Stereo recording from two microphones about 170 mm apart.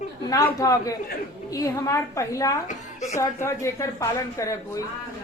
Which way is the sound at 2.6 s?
45° left (ahead or behind).